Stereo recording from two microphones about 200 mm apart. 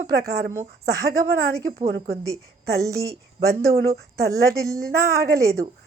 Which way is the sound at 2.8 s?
15° right (ahead or behind).